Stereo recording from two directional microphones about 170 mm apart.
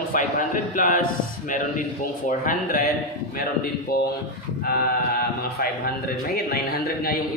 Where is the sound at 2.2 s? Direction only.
55° left (ahead or behind).